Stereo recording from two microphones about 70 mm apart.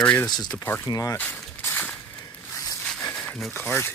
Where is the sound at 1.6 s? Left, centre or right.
Left.